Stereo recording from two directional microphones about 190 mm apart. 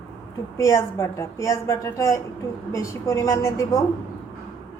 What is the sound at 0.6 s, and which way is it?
A woman's voice, 15° left (ahead or behind).